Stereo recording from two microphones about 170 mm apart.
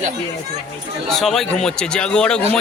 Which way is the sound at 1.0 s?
Centre (ahead or behind).